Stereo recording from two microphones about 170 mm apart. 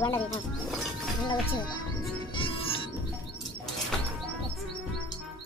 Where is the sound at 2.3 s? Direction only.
30° left (ahead or behind).